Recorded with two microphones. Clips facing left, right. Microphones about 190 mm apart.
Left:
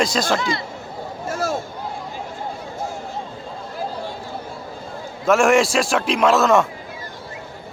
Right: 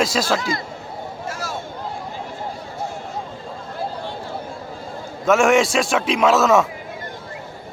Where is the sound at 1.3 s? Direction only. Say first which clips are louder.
Left 8 dB; 50° left (ahead or behind).